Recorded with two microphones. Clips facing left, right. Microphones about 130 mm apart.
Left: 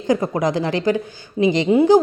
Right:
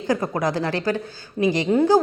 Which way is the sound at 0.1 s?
20° left (ahead or behind).